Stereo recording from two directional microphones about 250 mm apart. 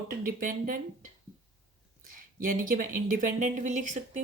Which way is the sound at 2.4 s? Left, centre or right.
Right.